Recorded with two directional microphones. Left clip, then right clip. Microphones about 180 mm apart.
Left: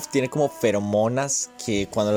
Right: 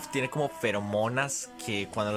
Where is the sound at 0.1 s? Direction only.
20° left (ahead or behind).